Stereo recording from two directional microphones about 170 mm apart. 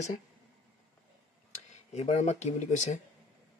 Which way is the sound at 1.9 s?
40° left (ahead or behind).